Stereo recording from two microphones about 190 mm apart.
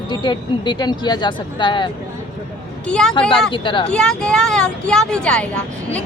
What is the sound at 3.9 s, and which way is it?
A woman's voice, 5° left (ahead or behind).